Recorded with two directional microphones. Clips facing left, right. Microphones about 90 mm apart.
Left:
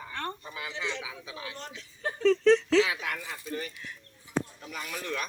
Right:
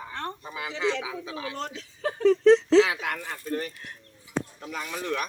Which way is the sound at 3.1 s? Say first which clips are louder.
Right 5 dB; 40° right (ahead or behind).